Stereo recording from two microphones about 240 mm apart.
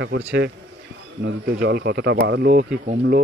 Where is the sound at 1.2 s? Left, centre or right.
Right.